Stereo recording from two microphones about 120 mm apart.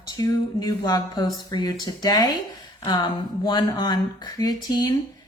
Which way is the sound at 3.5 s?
35° left (ahead or behind).